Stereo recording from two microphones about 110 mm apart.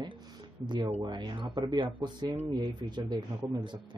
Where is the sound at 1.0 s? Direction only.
45° right (ahead or behind).